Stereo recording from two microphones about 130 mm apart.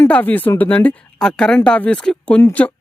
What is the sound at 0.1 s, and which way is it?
Speech, 15° left (ahead or behind).